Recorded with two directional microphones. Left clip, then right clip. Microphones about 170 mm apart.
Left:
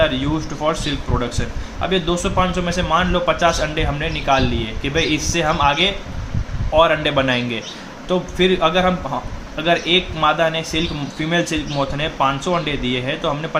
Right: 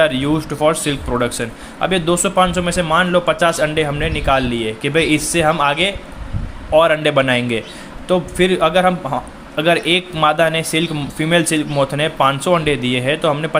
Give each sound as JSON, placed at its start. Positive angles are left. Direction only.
{"t": 0.0, "sound": "speech", "side_deg": -50}